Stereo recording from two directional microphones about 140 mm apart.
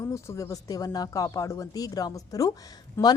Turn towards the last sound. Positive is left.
turn(degrees=15)  # may be behind; listen again after turning